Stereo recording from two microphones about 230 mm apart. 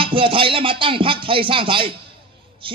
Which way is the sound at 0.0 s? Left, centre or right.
Right.